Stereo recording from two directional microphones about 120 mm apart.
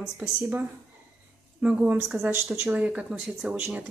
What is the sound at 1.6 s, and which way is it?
Speech, 10° right (ahead or behind).